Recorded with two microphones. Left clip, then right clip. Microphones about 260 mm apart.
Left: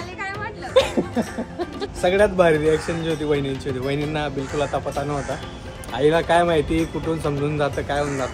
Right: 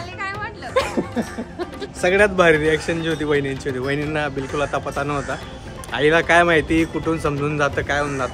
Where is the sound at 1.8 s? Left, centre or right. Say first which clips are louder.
Right 1 dB; right.